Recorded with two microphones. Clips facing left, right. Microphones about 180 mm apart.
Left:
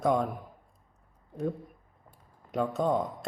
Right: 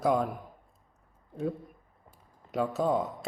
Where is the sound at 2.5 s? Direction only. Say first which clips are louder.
Even; 5° right (ahead or behind).